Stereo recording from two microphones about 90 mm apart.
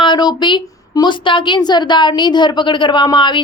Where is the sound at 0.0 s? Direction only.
55° left (ahead or behind).